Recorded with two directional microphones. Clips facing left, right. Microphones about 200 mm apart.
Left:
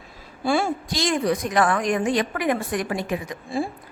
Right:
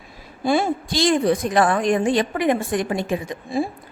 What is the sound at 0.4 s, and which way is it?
A woman's voice, 20° right (ahead or behind).